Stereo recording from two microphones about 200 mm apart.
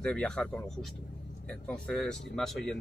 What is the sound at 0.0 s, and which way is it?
Speech, 5° left (ahead or behind).